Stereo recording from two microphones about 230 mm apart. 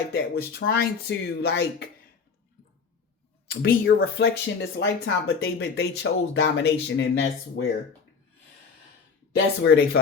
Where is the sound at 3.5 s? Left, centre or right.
Left.